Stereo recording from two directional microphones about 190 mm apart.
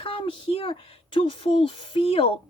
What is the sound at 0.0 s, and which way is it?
A woman's voice, 30° left (ahead or behind).